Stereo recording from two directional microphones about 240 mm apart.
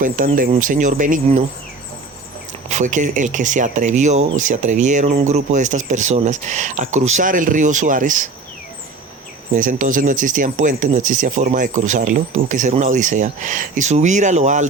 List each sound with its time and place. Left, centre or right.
0.0 s speech: right
2.6 s speech: right
9.6 s speech: right